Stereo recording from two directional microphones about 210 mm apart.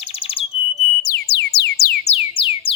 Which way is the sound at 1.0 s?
55° left (ahead or behind).